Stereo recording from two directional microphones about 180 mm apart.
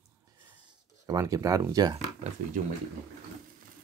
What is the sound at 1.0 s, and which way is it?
Speech, 20° right (ahead or behind).